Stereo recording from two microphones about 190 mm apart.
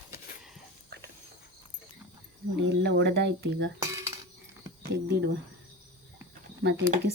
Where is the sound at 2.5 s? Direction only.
65° right (ahead or behind).